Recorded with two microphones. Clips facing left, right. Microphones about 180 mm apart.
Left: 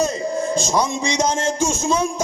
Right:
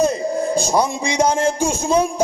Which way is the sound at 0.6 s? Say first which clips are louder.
Right 3 dB; 10° right (ahead or behind).